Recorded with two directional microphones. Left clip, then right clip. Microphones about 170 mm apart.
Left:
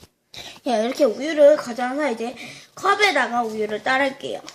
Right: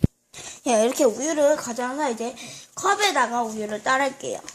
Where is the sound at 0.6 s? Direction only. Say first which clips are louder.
Even; 35° right (ahead or behind); by 4.4 s 50° right (ahead or behind).